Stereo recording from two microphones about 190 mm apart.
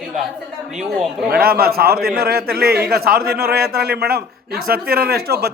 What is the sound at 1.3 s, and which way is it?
A man's voice, 50° right (ahead or behind).